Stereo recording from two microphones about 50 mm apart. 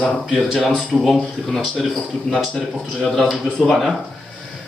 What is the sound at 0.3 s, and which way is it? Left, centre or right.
Speech, centre.